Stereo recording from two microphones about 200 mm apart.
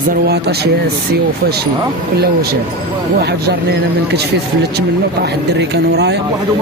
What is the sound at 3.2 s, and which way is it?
Speech, 55° right (ahead or behind).